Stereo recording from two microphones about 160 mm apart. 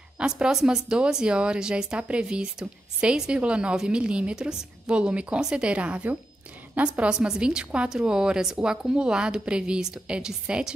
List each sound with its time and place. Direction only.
0.4 s a woman's voice: 5° right (ahead or behind)